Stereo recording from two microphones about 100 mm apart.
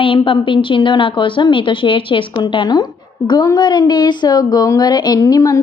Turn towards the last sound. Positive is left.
turn(degrees=35)  # may be behind; listen again after turning